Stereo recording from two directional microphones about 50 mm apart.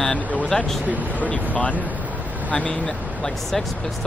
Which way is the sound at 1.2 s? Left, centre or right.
Left.